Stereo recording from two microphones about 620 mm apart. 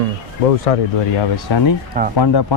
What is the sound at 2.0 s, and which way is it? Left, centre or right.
Speech, centre.